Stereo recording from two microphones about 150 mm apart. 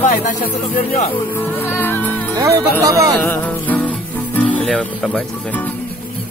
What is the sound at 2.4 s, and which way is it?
Speech, 25° right (ahead or behind).